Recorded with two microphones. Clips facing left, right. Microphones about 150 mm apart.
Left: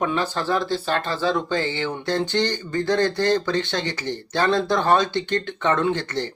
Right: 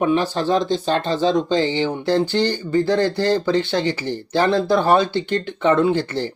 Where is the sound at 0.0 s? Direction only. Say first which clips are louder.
Right 5 dB; 15° right (ahead or behind).